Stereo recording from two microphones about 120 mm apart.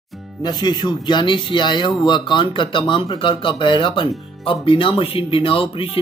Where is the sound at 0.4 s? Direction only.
35° left (ahead or behind).